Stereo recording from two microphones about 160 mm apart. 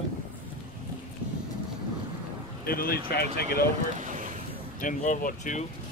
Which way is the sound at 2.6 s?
70° left (ahead or behind).